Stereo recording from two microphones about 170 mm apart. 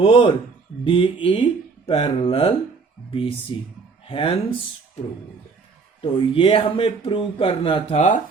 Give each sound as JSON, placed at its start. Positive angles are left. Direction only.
{"t": 0.0, "sound": "speech", "side_deg": 30}
{"t": 6.0, "sound": "speech", "side_deg": 30}